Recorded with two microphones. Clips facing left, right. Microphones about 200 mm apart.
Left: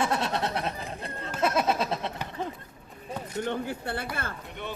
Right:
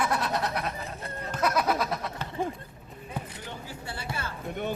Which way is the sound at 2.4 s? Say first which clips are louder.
Right 4 dB; 10° right (ahead or behind).